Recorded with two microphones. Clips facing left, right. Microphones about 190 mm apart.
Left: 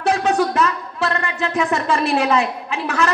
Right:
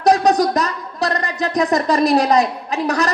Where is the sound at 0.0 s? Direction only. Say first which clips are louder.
Right 4 dB; 40° right (ahead or behind).